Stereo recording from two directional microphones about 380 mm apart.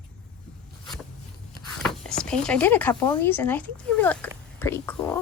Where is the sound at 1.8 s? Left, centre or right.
Centre.